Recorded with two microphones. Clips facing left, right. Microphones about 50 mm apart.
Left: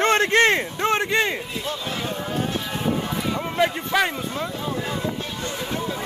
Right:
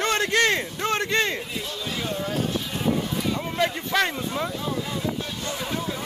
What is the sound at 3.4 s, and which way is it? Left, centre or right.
Speech, centre.